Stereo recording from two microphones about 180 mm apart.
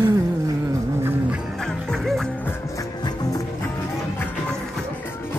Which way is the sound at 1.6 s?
5° left (ahead or behind).